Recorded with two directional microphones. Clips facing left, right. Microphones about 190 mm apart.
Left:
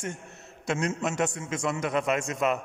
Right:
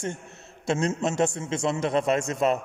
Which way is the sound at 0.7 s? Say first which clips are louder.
Right 3 dB; 30° right (ahead or behind).